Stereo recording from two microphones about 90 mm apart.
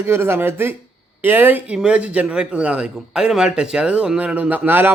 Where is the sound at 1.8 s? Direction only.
10° right (ahead or behind).